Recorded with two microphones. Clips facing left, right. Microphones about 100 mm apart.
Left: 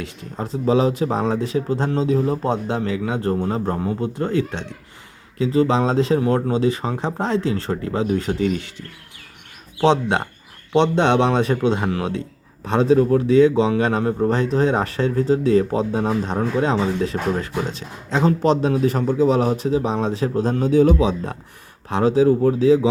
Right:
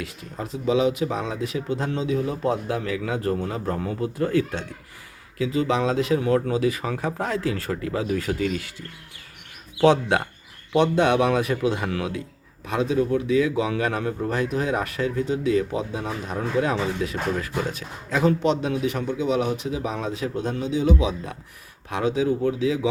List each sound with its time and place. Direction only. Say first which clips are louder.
0.0 s a man's voice: left 3 dB; 30° left (ahead or behind)
9.8 s a man's voice: left 1 dB; 25° left (ahead or behind); by 21.1 s 45° left (ahead or behind)
21.8 s a man's voice: left 7 dB; 35° left (ahead or behind)